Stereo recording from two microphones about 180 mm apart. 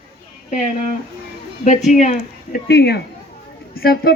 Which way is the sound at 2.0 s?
40° left (ahead or behind).